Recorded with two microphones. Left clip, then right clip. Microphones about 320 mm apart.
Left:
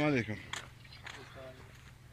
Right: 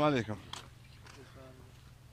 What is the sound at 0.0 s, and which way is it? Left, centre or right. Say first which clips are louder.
Speech: right 2 dB; centre.